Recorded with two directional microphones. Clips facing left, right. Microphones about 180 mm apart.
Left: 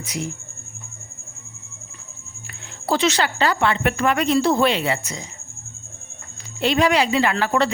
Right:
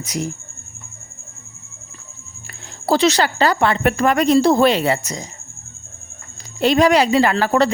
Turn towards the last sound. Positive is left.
turn(degrees=-40)  # may be behind; listen again after turning